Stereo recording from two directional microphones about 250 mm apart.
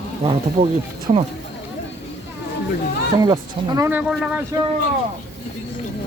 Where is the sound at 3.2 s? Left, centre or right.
Centre.